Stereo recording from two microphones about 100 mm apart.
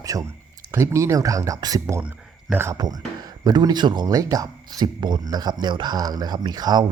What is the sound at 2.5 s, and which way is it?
Speech, 25° right (ahead or behind).